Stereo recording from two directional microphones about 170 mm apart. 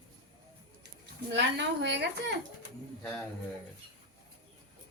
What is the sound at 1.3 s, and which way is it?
A woman's voice, 90° right.